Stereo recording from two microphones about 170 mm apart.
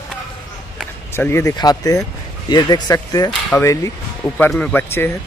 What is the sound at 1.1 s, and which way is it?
Speech, 15° left (ahead or behind).